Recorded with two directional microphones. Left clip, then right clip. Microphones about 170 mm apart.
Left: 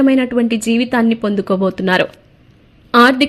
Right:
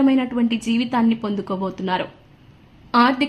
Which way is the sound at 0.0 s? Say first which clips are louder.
Left 6 dB; 25° left (ahead or behind).